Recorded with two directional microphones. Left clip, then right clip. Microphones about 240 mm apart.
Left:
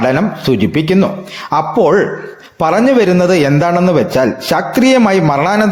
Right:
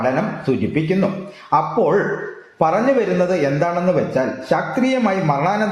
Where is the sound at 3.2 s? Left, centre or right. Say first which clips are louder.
Left 6 dB; left.